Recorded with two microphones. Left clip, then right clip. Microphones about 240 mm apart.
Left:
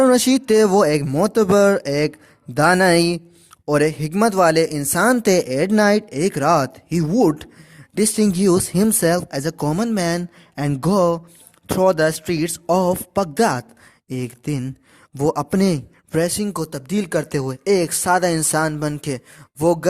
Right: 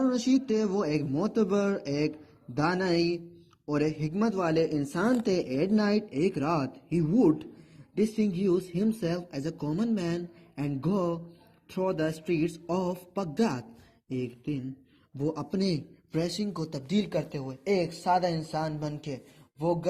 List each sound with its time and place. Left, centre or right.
0.0 s speech: left
15.1 s speech: left